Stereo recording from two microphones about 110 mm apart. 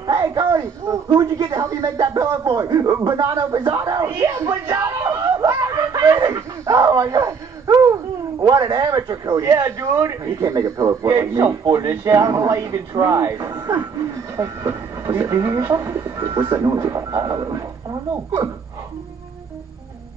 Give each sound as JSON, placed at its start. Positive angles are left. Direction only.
{"t": 0.0, "sound": "speech", "side_deg": -35}
{"t": 4.1, "sound": "snicker", "side_deg": -25}
{"t": 9.4, "sound": "speech", "side_deg": -25}
{"t": 16.2, "sound": "speech", "side_deg": -35}